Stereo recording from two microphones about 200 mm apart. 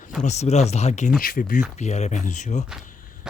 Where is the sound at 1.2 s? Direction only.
45° left (ahead or behind).